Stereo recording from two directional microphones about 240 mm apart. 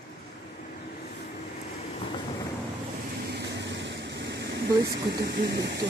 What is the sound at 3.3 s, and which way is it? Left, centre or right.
Vehicle, right.